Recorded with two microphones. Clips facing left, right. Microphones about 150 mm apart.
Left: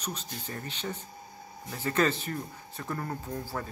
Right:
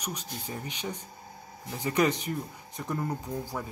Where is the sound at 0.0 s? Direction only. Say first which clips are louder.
Right 1 dB; 10° right (ahead or behind).